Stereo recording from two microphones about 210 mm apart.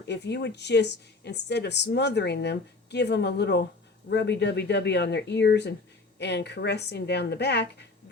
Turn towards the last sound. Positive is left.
turn(degrees=55)  # may be behind; listen again after turning